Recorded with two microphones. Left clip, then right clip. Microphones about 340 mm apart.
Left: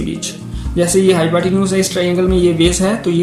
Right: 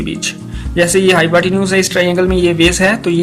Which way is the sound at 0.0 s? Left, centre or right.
Right.